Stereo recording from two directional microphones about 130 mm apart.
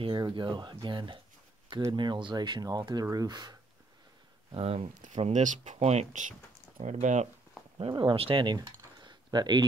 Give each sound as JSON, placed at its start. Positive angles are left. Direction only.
{"t": 0.0, "sound": "speech", "side_deg": -35}
{"t": 4.5, "sound": "speech", "side_deg": -45}
{"t": 5.0, "sound": "speech", "side_deg": -65}
{"t": 7.7, "sound": "speech", "side_deg": -40}